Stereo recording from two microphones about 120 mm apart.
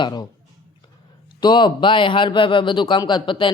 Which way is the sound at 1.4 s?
40° left (ahead or behind).